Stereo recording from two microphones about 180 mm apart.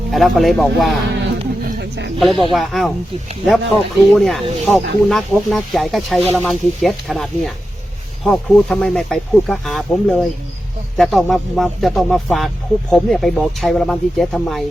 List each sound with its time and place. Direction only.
0.1 s speech: centre (ahead or behind)
1.2 s a sound: 70° right (ahead or behind)
2.1 s speech: centre (ahead or behind)
4.1 s speech: centre (ahead or behind)